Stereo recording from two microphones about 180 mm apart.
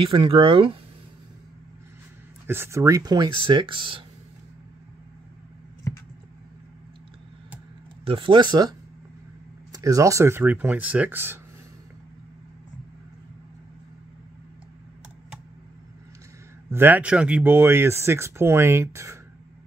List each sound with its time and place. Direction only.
0.0 s speech: 30° right (ahead or behind)
2.4 s speech: 15° right (ahead or behind); by 4.0 s 30° right (ahead or behind)
8.0 s speech: 30° right (ahead or behind); by 11.3 s 10° right (ahead or behind)
16.7 s speech: 10° right (ahead or behind)